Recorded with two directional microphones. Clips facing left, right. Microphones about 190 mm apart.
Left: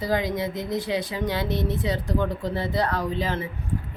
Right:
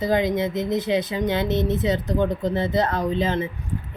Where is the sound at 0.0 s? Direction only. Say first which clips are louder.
Right 4 dB; 20° right (ahead or behind).